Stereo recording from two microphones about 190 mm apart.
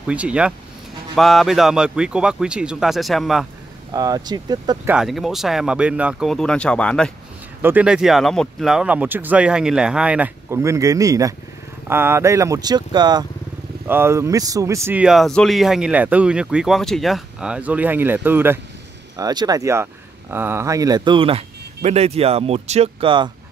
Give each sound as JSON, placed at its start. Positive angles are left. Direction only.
{"t": 0.0, "sound": "speech", "side_deg": -5}
{"t": 3.9, "sound": "speech", "side_deg": -20}
{"t": 4.8, "sound": "speech", "side_deg": -5}
{"t": 7.6, "sound": "speech", "side_deg": -5}